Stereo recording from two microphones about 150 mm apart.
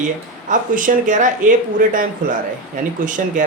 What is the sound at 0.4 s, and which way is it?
Speech, 60° right (ahead or behind).